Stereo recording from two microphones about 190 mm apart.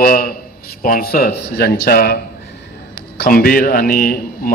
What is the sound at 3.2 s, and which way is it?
A man's voice, 50° left (ahead or behind).